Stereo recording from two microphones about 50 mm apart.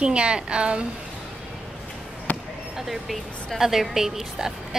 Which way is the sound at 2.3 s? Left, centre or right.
Left.